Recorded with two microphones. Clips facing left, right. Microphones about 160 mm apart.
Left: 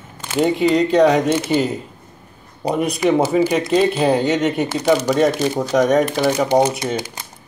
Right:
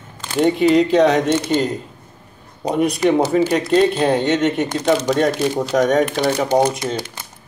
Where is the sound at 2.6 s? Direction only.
Centre (ahead or behind).